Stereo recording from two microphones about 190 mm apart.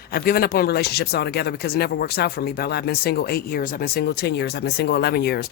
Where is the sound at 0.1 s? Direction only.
55° left (ahead or behind).